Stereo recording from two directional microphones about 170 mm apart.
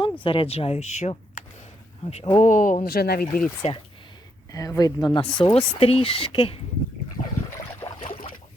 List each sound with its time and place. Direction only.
0.2 s speech: 30° left (ahead or behind); by 3.4 s 65° left (ahead or behind)
3.6 s speech: 40° left (ahead or behind)
4.5 s speech: 20° left (ahead or behind)
7.2 s boat: 50° left (ahead or behind)
8.0 s a sound: 55° left (ahead or behind)